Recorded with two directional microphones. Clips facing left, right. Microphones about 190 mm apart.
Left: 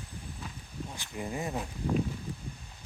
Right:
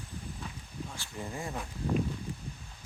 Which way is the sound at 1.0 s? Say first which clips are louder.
Left 5 dB; 20° left (ahead or behind).